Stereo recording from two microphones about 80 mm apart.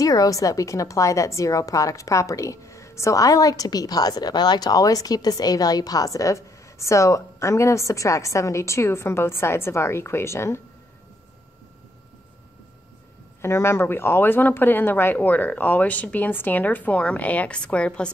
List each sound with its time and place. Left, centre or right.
0.0 s a woman's voice: left
13.4 s speech: left; by 18.1 s centre